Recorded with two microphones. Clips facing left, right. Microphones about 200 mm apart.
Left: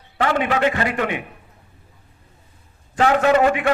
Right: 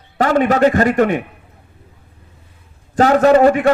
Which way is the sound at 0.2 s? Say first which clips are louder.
Right 6 dB; 40° right (ahead or behind).